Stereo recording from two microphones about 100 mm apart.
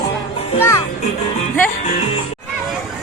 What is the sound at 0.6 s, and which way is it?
Speech, 25° left (ahead or behind).